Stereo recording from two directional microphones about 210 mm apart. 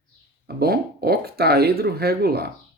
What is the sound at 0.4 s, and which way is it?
Speech, 50° right (ahead or behind).